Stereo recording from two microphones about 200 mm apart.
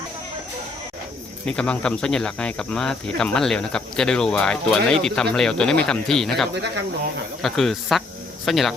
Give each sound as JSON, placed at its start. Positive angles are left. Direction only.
{"t": 1.5, "sound": "speech", "side_deg": 5}
{"t": 6.5, "sound": "speech", "side_deg": -60}
{"t": 7.4, "sound": "speech", "side_deg": 0}